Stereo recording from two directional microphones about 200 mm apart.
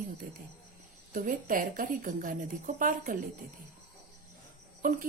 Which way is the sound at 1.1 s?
40° right (ahead or behind).